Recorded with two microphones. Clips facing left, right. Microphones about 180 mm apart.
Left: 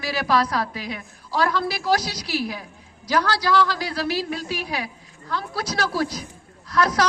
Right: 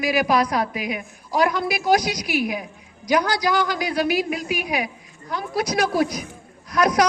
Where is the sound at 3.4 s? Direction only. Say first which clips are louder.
Even; 15° right (ahead or behind).